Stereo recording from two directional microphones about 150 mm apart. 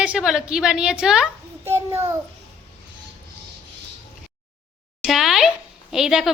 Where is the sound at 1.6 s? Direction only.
15° right (ahead or behind).